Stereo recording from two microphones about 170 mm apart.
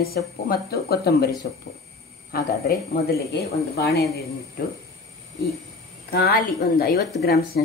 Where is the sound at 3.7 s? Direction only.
65° left (ahead or behind).